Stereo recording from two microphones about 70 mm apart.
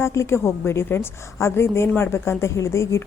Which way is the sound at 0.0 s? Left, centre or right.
Left.